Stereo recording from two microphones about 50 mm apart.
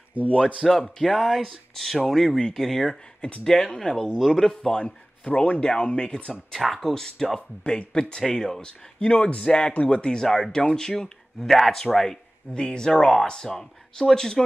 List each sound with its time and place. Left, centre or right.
0.2 s speech: right
0.7 s speech: centre
6.6 s speech: centre